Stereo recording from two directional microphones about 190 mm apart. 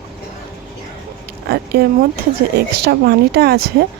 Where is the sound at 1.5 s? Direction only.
55° right (ahead or behind).